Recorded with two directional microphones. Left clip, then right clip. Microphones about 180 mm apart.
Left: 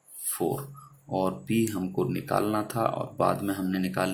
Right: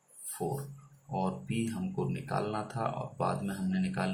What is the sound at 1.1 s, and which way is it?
Speech, 40° left (ahead or behind).